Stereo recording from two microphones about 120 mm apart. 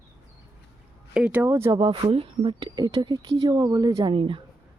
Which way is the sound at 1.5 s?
25° right (ahead or behind).